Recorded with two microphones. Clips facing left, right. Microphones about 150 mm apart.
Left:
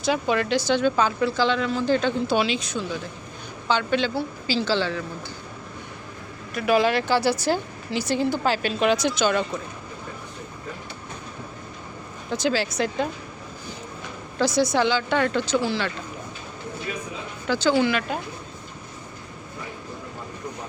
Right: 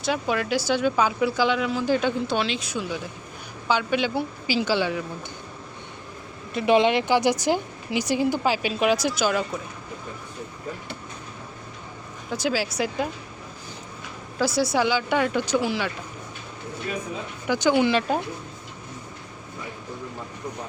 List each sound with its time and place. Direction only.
0.0 s speech: centre (ahead or behind)
2.2 s speech: 5° left (ahead or behind)
2.6 s speech: 10° right (ahead or behind)
6.5 s speech: 25° right (ahead or behind); by 9.5 s 5° right (ahead or behind)
12.3 s speech: 5° right (ahead or behind)
14.3 s speech: 5° right (ahead or behind)
17.4 s speech: 15° right (ahead or behind)